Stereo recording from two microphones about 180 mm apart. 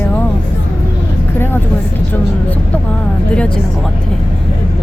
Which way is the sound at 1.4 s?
10° left (ahead or behind).